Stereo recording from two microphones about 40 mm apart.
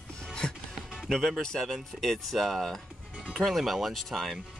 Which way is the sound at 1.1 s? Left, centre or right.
Centre.